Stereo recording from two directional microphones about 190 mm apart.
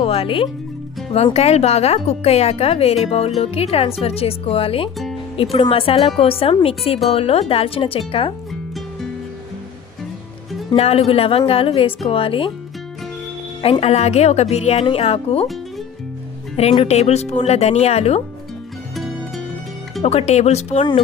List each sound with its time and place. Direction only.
0.0 s speech: 30° left (ahead or behind)
10.8 s speech: 35° left (ahead or behind)
13.6 s speech: 30° left (ahead or behind)
16.6 s speech: 30° left (ahead or behind)
20.0 s speech: 35° left (ahead or behind)